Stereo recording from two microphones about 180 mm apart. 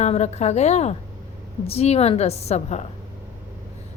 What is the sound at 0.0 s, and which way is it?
A woman's voice, 40° left (ahead or behind).